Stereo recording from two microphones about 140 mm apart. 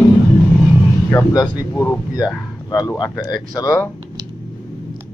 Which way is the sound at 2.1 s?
30° left (ahead or behind).